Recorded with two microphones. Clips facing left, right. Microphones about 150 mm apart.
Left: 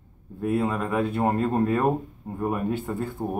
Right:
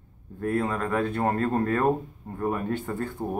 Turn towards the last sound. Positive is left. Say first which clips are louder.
# left 1 dB
turn(degrees=10)  # may be behind; listen again after turning